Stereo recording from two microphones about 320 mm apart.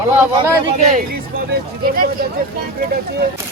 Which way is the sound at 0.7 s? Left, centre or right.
Right.